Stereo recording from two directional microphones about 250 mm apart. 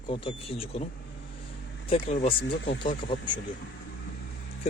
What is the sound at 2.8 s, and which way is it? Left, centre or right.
Speech, centre.